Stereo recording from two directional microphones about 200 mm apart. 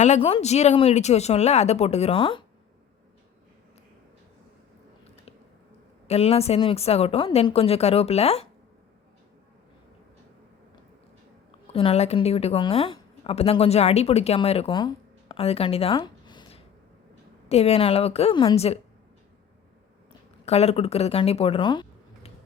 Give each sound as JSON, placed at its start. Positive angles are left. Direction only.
{"t": 0.0, "sound": "a woman's voice", "side_deg": 30}
{"t": 6.1, "sound": "a woman's voice", "side_deg": 30}
{"t": 11.7, "sound": "a woman's voice", "side_deg": 30}
{"t": 20.4, "sound": "speech", "side_deg": 30}